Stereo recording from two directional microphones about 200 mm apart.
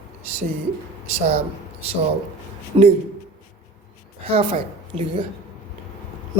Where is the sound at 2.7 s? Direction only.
25° right (ahead or behind).